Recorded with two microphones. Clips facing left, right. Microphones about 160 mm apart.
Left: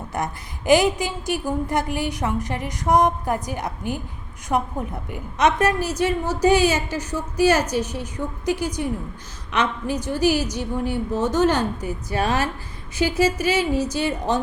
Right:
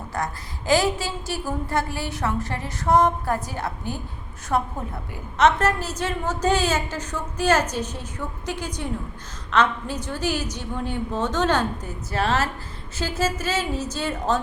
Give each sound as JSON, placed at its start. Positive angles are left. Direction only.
{"t": 0.1, "sound": "a woman's voice", "side_deg": 20}